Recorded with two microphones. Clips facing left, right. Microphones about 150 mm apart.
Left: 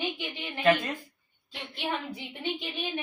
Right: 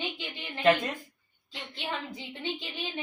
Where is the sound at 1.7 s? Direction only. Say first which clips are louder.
Left 3 dB; 15° left (ahead or behind).